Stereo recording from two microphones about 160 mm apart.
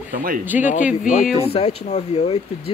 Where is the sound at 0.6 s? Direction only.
55° left (ahead or behind).